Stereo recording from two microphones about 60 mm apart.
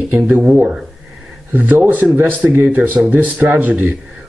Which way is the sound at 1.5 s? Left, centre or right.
Right.